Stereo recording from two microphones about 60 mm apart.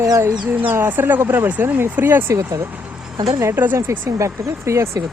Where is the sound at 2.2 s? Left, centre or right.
Right.